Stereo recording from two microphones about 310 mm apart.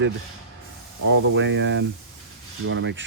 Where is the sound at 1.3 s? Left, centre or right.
Right.